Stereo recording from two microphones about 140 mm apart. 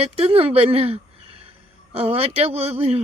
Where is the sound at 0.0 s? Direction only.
45° right (ahead or behind).